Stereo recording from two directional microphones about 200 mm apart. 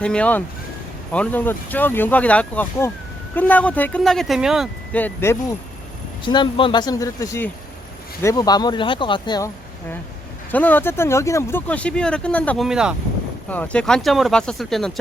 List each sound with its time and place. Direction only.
0.0 s speech: 5° left (ahead or behind)
6.2 s speech: 25° left (ahead or behind)
10.5 s speech: 10° left (ahead or behind)
13.5 s speech: 5° left (ahead or behind)